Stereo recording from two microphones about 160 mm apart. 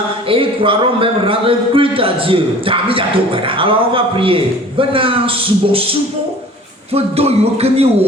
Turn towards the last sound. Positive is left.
turn(degrees=-40)  # may be behind; listen again after turning